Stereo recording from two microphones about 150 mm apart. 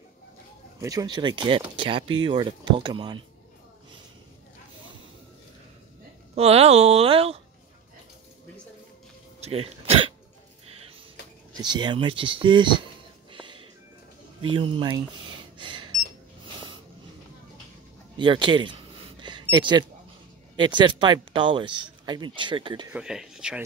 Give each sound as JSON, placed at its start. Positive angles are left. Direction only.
{"t": 0.7, "sound": "speech", "side_deg": -25}
{"t": 6.3, "sound": "speech", "side_deg": -40}
{"t": 9.4, "sound": "throat clearing", "side_deg": -40}
{"t": 11.5, "sound": "speech", "side_deg": -30}
{"t": 13.3, "sound": "music", "side_deg": -35}
{"t": 14.4, "sound": "speech", "side_deg": -35}
{"t": 15.5, "sound": "a sound", "side_deg": -30}
{"t": 18.1, "sound": "speech", "side_deg": -30}
{"t": 19.2, "sound": "a sound", "side_deg": -30}
{"t": 20.5, "sound": "speech", "side_deg": -30}
{"t": 22.9, "sound": "speech", "side_deg": -5}